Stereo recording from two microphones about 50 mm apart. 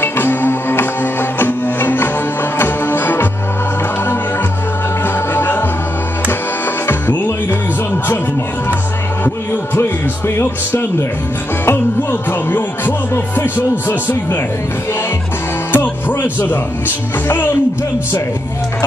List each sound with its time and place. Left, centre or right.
0.0 s music: left
5.0 s music: left
6.9 s music: left
9.8 s music: left
11.6 s music: left
15.7 s speech: left